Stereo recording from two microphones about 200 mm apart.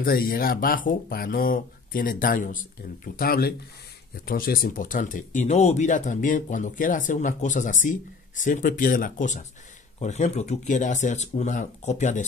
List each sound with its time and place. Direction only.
0.0 s speech: 45° left (ahead or behind)